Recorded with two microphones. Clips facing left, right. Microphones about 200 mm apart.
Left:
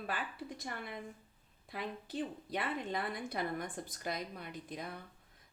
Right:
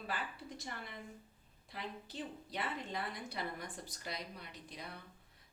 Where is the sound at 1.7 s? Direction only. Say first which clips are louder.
Left 5 dB; 55° left (ahead or behind).